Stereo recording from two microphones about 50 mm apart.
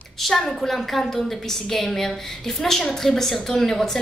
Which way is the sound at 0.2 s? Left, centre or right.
Centre.